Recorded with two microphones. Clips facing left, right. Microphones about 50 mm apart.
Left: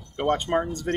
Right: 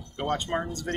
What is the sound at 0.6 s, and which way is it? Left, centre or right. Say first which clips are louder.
Speech: left 4 dB; left.